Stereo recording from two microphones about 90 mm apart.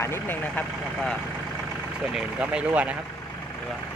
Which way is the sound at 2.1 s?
10° right (ahead or behind).